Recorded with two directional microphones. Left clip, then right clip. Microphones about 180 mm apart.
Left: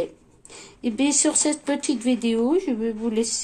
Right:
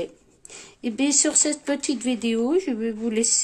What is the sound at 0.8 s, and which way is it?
Speech, 30° right (ahead or behind).